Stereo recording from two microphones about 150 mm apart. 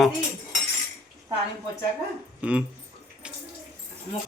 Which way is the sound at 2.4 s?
10° right (ahead or behind).